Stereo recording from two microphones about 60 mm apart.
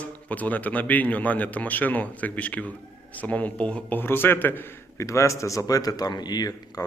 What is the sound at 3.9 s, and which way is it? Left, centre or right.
Speech, left.